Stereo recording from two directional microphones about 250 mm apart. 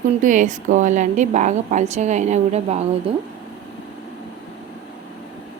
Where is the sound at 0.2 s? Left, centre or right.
Right.